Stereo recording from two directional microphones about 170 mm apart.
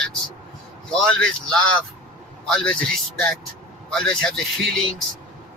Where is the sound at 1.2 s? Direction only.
5° left (ahead or behind).